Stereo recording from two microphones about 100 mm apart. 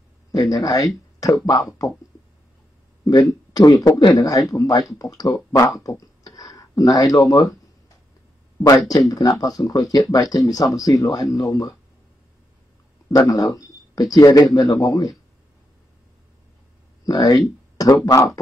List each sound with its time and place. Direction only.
0.3 s speech: 40° left (ahead or behind)
3.5 s speech: 40° left (ahead or behind)
5.9 s a sound: 35° left (ahead or behind)
8.6 s speech: 35° left (ahead or behind)
13.3 s a sound: 40° left (ahead or behind)
14.1 s speech: 35° left (ahead or behind)
14.6 s a man's voice: 55° left (ahead or behind)
14.9 s speech: 40° left (ahead or behind)
17.0 s speech: 40° left (ahead or behind)